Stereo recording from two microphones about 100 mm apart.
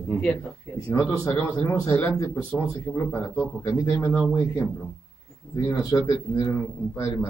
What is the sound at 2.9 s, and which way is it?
A man's voice, 10° left (ahead or behind).